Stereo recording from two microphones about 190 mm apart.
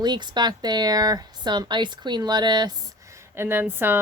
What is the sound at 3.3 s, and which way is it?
Speech, 10° right (ahead or behind).